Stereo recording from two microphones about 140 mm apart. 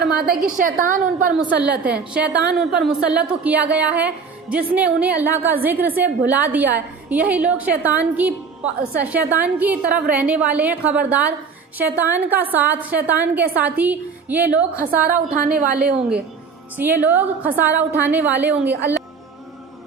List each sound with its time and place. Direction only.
0.1 s a woman's voice: 90° right
1.4 s a woman's voice: 10° right (ahead or behind)
15.5 s a woman's voice: 90° right
16.7 s a woman's voice: 15° right (ahead or behind)